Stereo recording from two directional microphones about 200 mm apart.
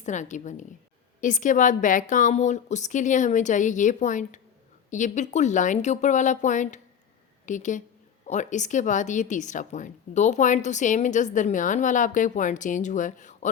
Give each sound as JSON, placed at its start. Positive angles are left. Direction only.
{"t": 0.0, "sound": "a woman's voice", "side_deg": 35}